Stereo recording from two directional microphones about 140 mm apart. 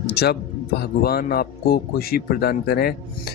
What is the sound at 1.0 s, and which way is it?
A man's voice, 90° left.